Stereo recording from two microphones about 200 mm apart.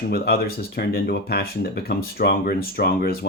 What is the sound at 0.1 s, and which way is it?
Speech, 50° left (ahead or behind).